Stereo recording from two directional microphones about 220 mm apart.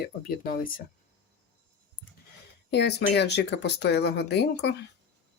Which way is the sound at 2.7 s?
50° left (ahead or behind).